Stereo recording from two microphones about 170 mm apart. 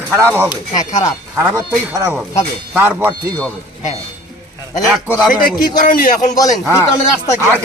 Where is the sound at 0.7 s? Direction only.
20° left (ahead or behind).